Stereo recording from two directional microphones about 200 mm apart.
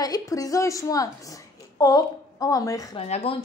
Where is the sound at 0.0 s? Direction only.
20° left (ahead or behind).